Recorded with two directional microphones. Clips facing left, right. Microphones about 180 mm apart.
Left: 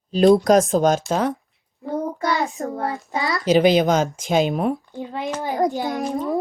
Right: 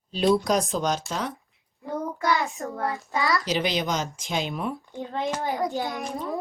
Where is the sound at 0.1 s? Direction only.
45° left (ahead or behind).